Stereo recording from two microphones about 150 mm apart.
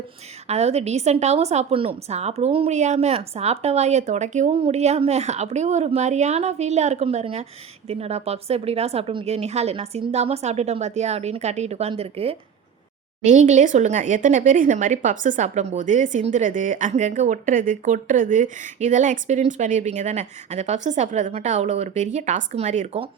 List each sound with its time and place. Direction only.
0.4 s a woman's voice: 45° right (ahead or behind)
13.2 s speech: 55° right (ahead or behind)